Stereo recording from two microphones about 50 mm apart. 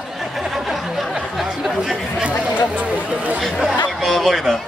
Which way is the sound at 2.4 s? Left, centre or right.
Right.